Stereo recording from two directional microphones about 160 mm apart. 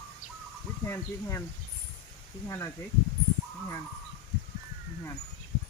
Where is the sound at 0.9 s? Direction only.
15° left (ahead or behind).